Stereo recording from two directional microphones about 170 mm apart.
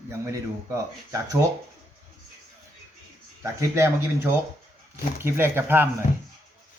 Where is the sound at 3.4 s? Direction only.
15° right (ahead or behind).